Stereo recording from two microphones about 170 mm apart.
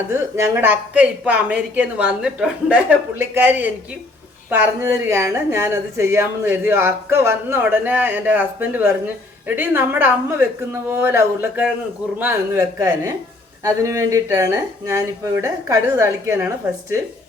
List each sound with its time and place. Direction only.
0.1 s speech: 15° right (ahead or behind)